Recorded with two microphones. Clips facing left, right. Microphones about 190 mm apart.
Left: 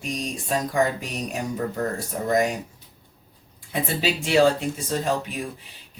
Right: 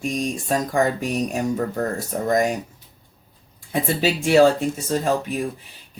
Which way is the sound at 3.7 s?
45° right (ahead or behind).